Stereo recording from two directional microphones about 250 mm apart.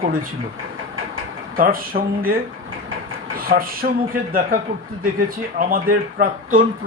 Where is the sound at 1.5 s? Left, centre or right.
Right.